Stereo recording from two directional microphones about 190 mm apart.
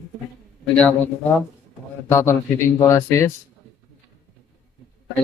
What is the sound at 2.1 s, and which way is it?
Speech, 15° left (ahead or behind).